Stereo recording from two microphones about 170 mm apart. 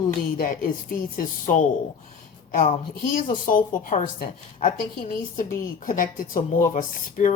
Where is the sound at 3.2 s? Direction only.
55° left (ahead or behind).